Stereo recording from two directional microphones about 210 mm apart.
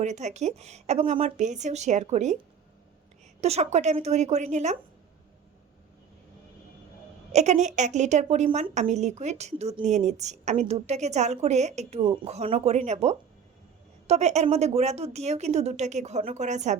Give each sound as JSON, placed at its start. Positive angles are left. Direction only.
{"t": 0.0, "sound": "a woman's voice", "side_deg": -35}
{"t": 3.4, "sound": "a woman's voice", "side_deg": -30}
{"t": 7.3, "sound": "a woman's voice", "side_deg": -35}